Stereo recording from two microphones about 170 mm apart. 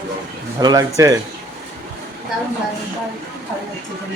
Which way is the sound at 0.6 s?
20° right (ahead or behind).